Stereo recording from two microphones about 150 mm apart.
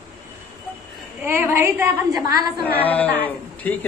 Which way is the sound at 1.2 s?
15° right (ahead or behind).